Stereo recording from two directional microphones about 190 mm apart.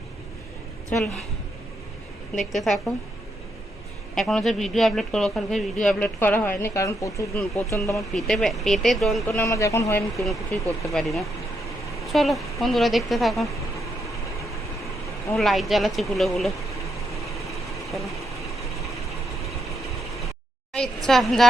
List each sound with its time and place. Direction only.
0.9 s a man's voice: 5° left (ahead or behind)
2.4 s a man's voice: centre (ahead or behind)
4.1 s a man's voice: 5° left (ahead or behind)
8.1 s a man's voice: centre (ahead or behind)
9.2 s a man's voice: 15° left (ahead or behind)
15.4 s a man's voice: centre (ahead or behind)
20.7 s a man's voice: 5° left (ahead or behind)